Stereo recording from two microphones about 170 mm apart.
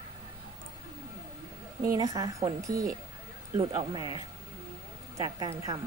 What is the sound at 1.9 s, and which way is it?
Speech, 20° right (ahead or behind).